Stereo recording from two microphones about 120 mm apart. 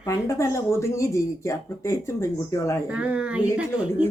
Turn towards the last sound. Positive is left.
turn(degrees=-10)  # may be behind; listen again after turning